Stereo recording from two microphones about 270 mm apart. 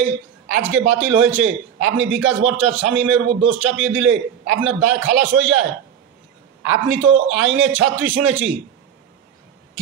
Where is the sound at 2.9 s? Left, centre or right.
Centre.